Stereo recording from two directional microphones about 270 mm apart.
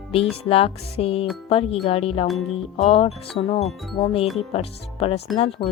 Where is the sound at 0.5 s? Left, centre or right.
Left.